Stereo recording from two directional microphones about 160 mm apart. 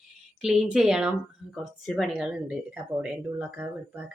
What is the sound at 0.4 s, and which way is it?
Speech, 5° right (ahead or behind).